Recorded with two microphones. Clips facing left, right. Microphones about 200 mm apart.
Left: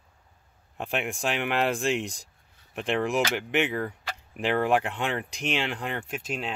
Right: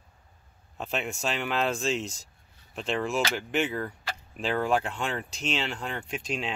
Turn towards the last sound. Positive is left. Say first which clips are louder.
# even
turn(degrees=5)  # may be behind; listen again after turning